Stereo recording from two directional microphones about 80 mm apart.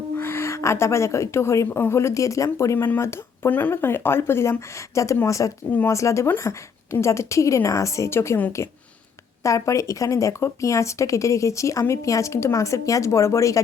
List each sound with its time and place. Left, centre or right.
0.2 s speech: left
2.7 s speech: left
5.2 s speech: left